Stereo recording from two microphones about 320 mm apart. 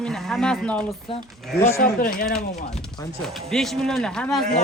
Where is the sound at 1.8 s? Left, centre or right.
Left.